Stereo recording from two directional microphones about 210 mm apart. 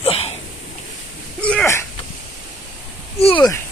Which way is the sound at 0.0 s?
25° left (ahead or behind).